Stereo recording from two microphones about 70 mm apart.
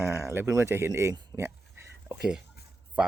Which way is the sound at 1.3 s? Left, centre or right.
Right.